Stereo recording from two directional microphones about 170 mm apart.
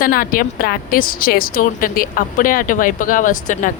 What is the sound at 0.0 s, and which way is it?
A woman's voice, 55° left (ahead or behind).